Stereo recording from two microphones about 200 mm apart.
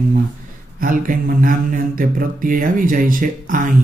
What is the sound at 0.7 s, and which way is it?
Mantra, 45° right (ahead or behind).